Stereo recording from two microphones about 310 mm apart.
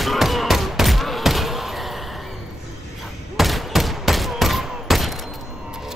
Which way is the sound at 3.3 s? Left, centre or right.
Centre.